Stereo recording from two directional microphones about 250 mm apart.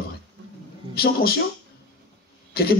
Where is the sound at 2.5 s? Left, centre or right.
Left.